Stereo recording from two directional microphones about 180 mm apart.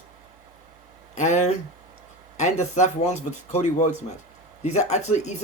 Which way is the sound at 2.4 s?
40° left (ahead or behind).